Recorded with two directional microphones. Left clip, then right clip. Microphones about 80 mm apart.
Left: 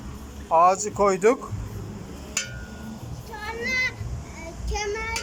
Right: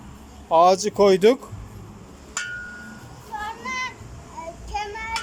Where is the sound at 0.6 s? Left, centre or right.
Right.